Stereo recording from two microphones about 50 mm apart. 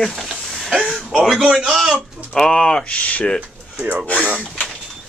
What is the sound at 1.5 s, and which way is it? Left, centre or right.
Speech, centre.